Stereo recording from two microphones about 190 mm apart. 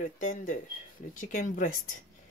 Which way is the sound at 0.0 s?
45° left (ahead or behind).